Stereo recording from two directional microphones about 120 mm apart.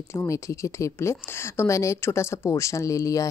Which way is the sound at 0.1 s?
25° left (ahead or behind).